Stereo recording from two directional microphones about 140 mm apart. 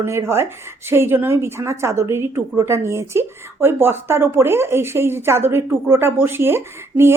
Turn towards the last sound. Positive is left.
turn(degrees=-15)  # may be behind; listen again after turning